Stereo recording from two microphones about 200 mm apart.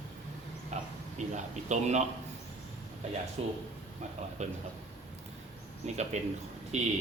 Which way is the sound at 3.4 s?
30° right (ahead or behind).